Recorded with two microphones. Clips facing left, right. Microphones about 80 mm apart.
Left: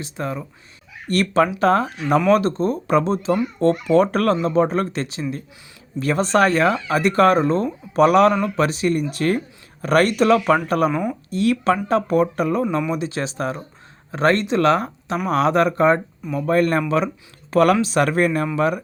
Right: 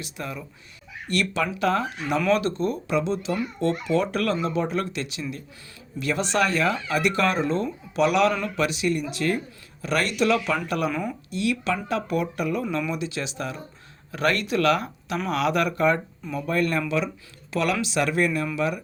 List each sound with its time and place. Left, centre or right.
0.0 s speech: left
10.9 s speech: left
11.3 s speech: left